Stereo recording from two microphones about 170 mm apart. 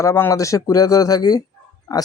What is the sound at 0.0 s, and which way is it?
Speech, 15° left (ahead or behind).